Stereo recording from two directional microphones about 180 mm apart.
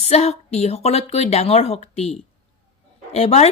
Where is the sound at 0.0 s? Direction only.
35° left (ahead or behind).